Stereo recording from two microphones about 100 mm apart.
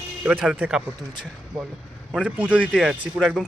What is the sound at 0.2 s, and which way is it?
Speech, 15° right (ahead or behind).